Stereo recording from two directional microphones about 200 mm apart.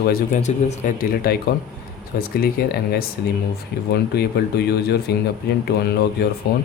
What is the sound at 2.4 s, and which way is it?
Speech, 50° left (ahead or behind).